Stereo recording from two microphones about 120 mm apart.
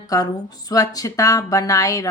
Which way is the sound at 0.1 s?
30° left (ahead or behind).